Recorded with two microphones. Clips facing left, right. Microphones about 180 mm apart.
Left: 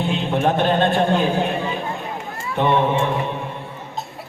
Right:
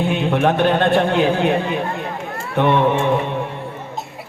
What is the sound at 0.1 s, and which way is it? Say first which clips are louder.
A man's voice: right 1 dB; 60° right (ahead or behind).